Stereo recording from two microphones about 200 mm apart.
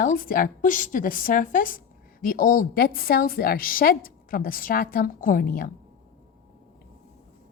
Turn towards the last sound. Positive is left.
turn(degrees=45)  # may be behind; listen again after turning